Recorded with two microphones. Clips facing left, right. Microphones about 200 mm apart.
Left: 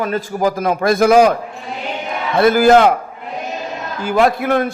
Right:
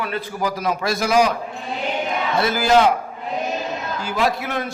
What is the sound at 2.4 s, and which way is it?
Speech, 55° left (ahead or behind).